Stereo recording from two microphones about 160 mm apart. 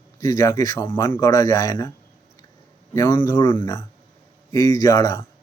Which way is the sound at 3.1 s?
30° left (ahead or behind).